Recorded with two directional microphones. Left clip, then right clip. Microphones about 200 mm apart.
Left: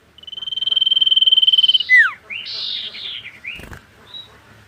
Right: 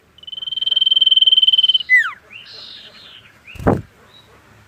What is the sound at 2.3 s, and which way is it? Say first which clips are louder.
Bird: left 10 dB; 10° left (ahead or behind).